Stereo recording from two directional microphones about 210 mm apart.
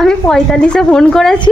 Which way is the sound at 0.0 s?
5° left (ahead or behind).